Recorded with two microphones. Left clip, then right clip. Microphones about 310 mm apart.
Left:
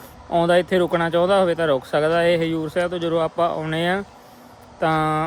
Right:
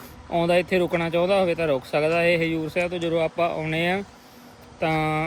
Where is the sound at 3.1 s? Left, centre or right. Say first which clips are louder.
Left 2 dB; left.